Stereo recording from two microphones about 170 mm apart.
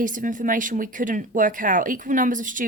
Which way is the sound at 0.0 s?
50° right (ahead or behind).